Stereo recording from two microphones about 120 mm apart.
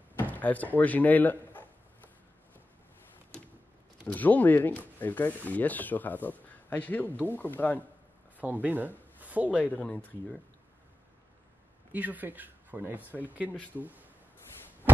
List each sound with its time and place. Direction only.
0.2 s speech: 15° left (ahead or behind)
4.1 s speech: 15° left (ahead or behind)
8.4 s speech: 15° right (ahead or behind)
9.6 s speech: 10° left (ahead or behind)
11.9 s speech: 15° right (ahead or behind)